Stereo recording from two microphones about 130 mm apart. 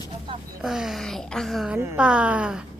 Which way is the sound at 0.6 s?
Centre (ahead or behind).